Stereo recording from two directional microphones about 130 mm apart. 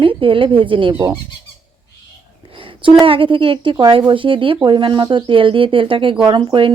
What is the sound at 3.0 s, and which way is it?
Speech, 40° right (ahead or behind).